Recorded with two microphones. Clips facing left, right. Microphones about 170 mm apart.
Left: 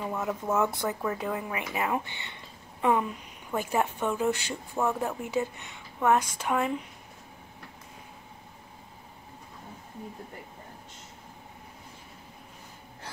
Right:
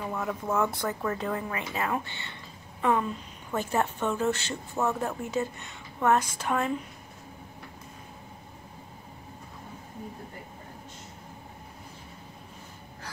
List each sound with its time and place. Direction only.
0.0 s a woman's voice: 15° left (ahead or behind)